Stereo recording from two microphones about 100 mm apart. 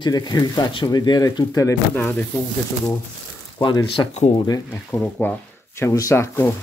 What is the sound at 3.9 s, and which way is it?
Speech, 55° left (ahead or behind).